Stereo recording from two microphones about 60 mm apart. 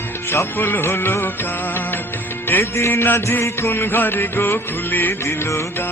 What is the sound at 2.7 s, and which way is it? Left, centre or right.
Music, left.